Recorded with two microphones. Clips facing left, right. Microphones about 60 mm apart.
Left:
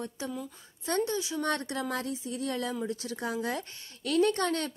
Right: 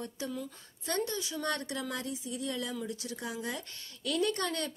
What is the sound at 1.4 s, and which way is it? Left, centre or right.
Speech, left.